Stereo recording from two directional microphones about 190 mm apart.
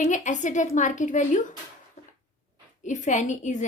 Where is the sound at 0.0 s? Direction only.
40° left (ahead or behind).